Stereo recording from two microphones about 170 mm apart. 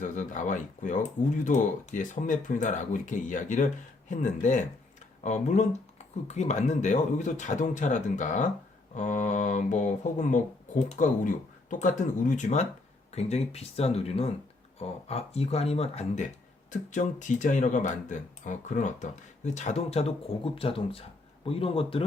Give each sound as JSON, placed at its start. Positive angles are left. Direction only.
{"t": 0.0, "sound": "speech", "side_deg": 45}